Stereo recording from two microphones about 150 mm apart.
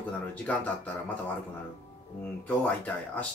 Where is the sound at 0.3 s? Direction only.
10° left (ahead or behind).